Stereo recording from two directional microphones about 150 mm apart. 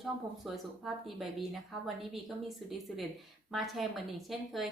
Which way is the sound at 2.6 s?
Centre (ahead or behind).